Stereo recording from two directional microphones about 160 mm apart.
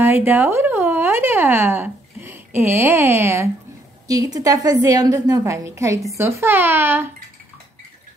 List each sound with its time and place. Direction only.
0.0 s a woman's voice: 15° right (ahead or behind)